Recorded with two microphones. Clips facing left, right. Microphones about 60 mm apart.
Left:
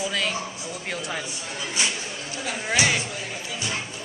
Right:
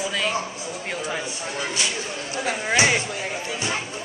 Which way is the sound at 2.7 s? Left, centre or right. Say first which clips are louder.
Right 3 dB; right.